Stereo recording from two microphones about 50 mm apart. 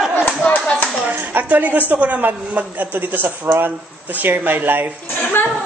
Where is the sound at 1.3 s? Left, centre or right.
Right.